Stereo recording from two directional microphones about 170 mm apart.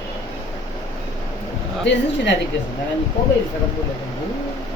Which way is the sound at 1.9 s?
90° left.